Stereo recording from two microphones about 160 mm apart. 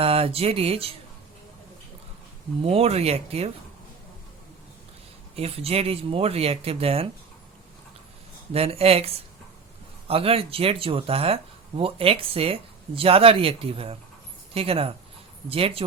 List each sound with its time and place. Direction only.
0.0 s speech: 35° right (ahead or behind)
2.6 s speech: 40° right (ahead or behind)
5.4 s speech: 40° right (ahead or behind)
8.5 s speech: 40° right (ahead or behind)